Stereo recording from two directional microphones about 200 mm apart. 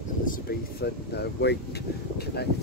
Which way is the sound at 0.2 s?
45° left (ahead or behind).